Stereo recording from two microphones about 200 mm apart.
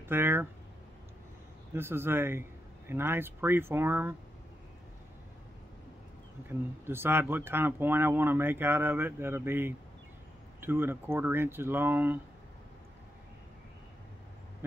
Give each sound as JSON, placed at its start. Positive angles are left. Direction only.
{"t": 0.1, "sound": "speech", "side_deg": -10}
{"t": 1.7, "sound": "speech", "side_deg": -10}
{"t": 6.9, "sound": "speech", "side_deg": -10}
{"t": 14.6, "sound": "speech", "side_deg": -10}